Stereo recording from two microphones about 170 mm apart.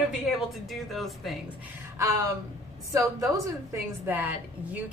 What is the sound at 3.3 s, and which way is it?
A woman's voice, 15° right (ahead or behind).